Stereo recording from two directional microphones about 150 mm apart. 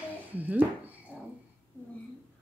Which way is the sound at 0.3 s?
10° right (ahead or behind).